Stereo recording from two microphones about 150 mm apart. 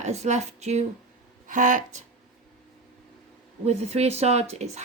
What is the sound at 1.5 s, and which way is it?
Speech, 60° right (ahead or behind).